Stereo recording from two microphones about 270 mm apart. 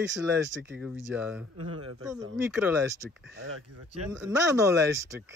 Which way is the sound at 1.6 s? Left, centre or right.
Right.